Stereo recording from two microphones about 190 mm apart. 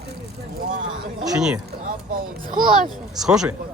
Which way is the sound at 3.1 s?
5° right (ahead or behind).